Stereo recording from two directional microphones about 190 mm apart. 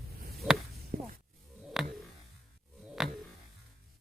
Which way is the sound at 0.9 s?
40° right (ahead or behind).